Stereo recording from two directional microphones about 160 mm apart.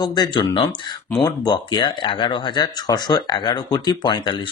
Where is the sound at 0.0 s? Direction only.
25° left (ahead or behind).